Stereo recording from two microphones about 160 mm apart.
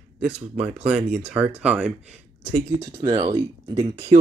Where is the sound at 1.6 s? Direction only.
5° right (ahead or behind).